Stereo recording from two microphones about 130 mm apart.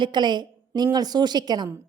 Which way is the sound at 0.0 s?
35° right (ahead or behind).